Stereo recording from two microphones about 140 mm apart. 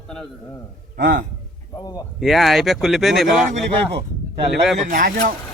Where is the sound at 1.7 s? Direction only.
30° left (ahead or behind).